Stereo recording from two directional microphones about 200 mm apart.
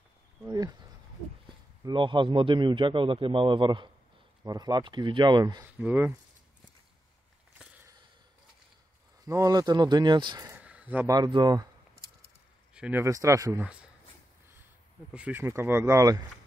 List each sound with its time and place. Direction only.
0.5 s a man's voice: 20° right (ahead or behind)
1.9 s a man's voice: 25° right (ahead or behind); by 6.1 s 10° right (ahead or behind)
7.5 s a sound: 5° right (ahead or behind)
9.2 s a man's voice: 15° right (ahead or behind)
12.7 s speech: 5° right (ahead or behind)
15.1 s speech: 10° right (ahead or behind)